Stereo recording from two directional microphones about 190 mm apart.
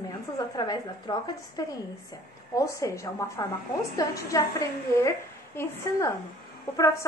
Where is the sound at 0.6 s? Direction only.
20° left (ahead or behind).